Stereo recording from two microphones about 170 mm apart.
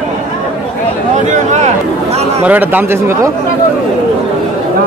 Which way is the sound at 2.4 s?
10° right (ahead or behind).